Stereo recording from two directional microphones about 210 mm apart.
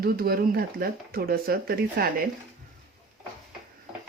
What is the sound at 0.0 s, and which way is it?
Speech, 45° right (ahead or behind).